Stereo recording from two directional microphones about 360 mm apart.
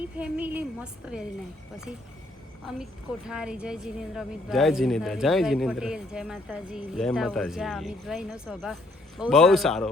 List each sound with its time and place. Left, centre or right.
0.0 s a woman's voice: centre
3.2 s a woman's voice: centre